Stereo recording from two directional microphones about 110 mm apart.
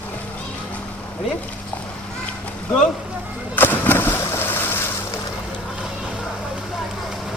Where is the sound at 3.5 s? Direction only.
15° left (ahead or behind).